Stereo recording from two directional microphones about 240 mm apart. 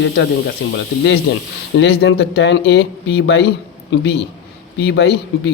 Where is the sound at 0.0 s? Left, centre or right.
Left.